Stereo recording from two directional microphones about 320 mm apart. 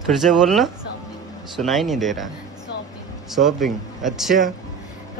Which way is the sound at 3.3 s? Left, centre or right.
Centre.